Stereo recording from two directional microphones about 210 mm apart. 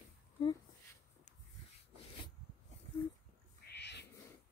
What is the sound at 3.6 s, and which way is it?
Owl, 55° left (ahead or behind).